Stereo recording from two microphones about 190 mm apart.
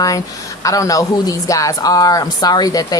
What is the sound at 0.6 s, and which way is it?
A woman's voice, 15° left (ahead or behind).